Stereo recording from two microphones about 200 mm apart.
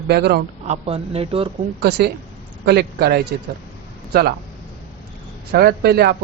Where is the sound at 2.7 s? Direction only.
55° right (ahead or behind).